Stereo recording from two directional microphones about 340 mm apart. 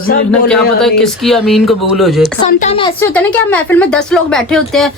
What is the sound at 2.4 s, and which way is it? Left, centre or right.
Speech, centre.